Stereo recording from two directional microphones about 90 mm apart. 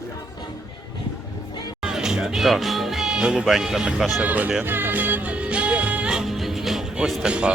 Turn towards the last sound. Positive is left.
turn(degrees=-10)  # may be behind; listen again after turning